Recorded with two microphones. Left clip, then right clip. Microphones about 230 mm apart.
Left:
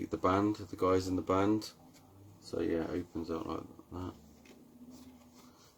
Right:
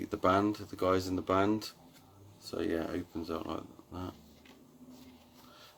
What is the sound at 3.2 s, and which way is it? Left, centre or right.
Speech, centre.